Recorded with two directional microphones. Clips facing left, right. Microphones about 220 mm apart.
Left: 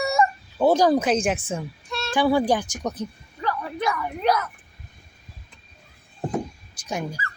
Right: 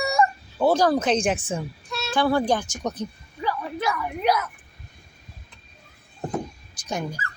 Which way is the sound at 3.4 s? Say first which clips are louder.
Even; 5° right (ahead or behind).